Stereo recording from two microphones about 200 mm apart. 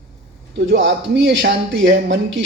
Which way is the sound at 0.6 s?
60° right (ahead or behind).